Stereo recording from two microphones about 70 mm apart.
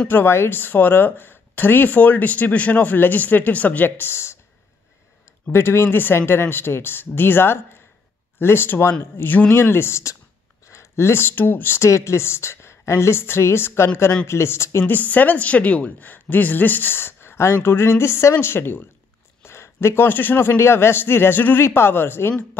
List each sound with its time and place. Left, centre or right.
0.1 s speech: left
5.5 s speech: left
14.9 s speech: left